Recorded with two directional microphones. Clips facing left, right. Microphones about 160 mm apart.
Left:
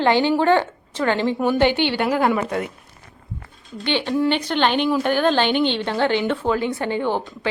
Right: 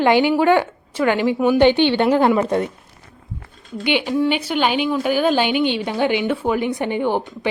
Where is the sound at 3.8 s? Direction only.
10° right (ahead or behind).